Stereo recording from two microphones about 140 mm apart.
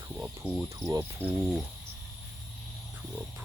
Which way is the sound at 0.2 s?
10° right (ahead or behind).